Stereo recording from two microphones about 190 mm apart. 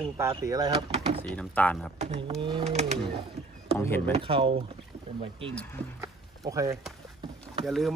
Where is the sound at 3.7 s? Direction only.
10° left (ahead or behind).